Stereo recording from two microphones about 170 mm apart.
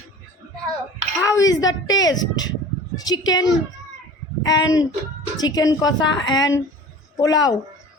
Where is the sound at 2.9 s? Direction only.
20° left (ahead or behind).